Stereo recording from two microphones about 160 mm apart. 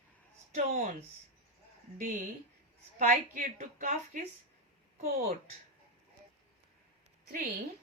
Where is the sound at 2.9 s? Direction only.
60° right (ahead or behind).